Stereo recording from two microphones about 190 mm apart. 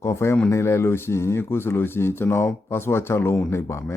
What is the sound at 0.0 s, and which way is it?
Speech, 15° left (ahead or behind).